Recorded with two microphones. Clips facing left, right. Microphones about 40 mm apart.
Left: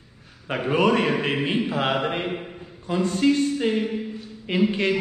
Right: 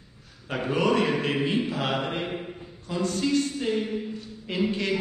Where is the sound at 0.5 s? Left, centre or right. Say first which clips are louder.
Left 4 dB; left.